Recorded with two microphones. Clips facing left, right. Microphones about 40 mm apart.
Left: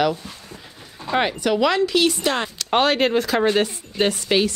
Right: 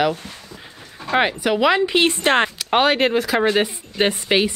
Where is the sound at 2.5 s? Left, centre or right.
Centre.